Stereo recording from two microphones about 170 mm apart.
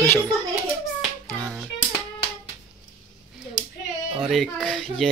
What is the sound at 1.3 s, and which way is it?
Music, centre (ahead or behind).